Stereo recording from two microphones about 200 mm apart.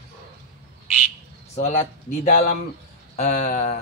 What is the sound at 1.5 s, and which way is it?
Speech, 30° left (ahead or behind).